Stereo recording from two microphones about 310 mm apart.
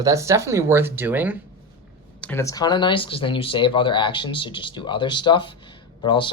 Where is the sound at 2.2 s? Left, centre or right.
Centre.